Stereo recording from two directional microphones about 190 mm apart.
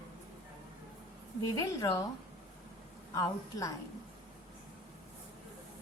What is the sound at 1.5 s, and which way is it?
Speech, 20° left (ahead or behind).